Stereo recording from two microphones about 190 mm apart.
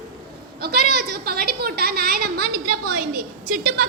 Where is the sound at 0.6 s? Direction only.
55° right (ahead or behind).